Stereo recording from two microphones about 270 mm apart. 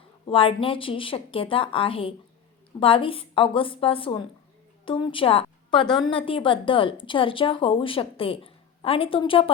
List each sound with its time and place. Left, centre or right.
0.3 s a woman's voice: centre